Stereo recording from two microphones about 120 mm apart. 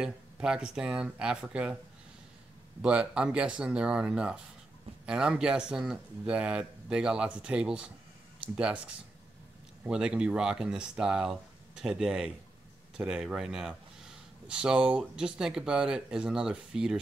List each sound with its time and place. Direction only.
0.0 s speech: 5° right (ahead or behind)
2.8 s speech: 10° right (ahead or behind)